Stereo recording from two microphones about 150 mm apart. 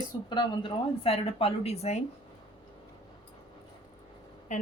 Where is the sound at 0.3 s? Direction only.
30° left (ahead or behind).